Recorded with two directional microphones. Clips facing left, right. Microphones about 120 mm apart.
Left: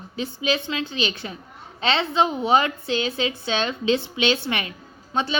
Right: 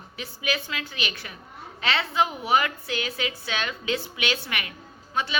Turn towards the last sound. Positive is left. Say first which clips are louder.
# left 4 dB
turn(degrees=30)  # may be behind; listen again after turning